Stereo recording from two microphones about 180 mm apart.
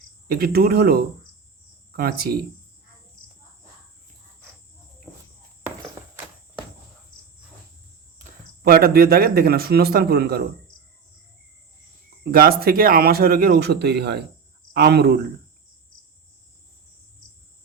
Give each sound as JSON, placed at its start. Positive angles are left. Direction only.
{"t": 0.3, "sound": "speech", "side_deg": -55}
{"t": 5.1, "sound": "walk", "side_deg": 15}
{"t": 8.2, "sound": "speech", "side_deg": -55}
{"t": 12.2, "sound": "speech", "side_deg": -55}